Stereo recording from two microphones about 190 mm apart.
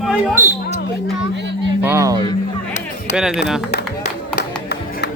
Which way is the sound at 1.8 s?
15° right (ahead or behind).